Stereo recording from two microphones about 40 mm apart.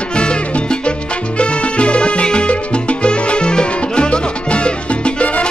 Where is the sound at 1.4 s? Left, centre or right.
Left.